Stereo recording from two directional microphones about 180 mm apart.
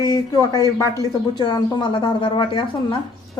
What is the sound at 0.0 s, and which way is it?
Speech, 20° left (ahead or behind).